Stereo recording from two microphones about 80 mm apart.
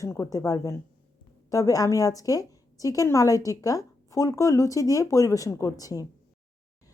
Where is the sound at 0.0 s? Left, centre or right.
Left.